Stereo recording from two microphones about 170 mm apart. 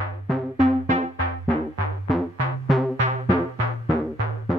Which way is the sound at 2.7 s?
Centre (ahead or behind).